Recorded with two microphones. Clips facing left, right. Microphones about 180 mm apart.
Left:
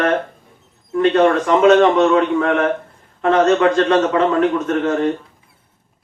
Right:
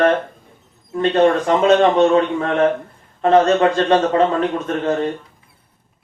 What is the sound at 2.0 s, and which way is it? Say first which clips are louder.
Speech: even; 35° right (ahead or behind).